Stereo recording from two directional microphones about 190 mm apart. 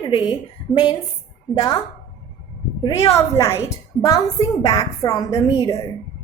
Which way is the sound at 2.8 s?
30° left (ahead or behind).